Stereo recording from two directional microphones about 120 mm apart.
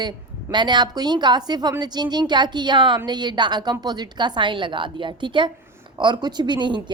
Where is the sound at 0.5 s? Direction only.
40° right (ahead or behind).